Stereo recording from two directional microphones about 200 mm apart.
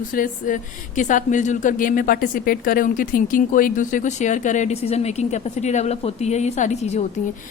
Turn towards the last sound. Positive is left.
turn(degrees=35)  # may be behind; listen again after turning